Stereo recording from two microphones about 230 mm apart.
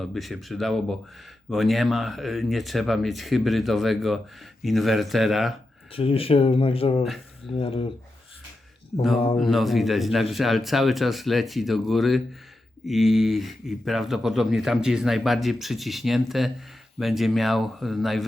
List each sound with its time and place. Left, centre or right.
0.0 s speech: centre
5.9 s speech: left
9.4 s speech: centre